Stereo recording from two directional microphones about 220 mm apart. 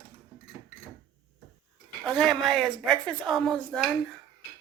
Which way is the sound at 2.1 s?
Centre (ahead or behind).